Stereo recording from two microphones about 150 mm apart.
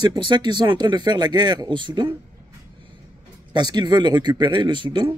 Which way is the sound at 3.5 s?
30° right (ahead or behind).